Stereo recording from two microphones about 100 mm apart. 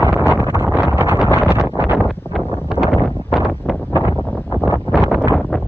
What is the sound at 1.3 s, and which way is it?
Wind noise, 25° left (ahead or behind).